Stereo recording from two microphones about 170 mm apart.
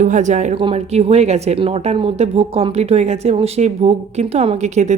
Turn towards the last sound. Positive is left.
turn(degrees=-45)  # may be behind; listen again after turning